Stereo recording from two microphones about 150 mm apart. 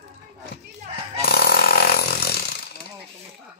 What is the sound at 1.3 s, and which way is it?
Chainsaw, 90° left.